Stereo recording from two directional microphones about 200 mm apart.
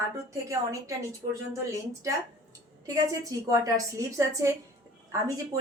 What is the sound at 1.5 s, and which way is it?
A woman's voice, 15° right (ahead or behind).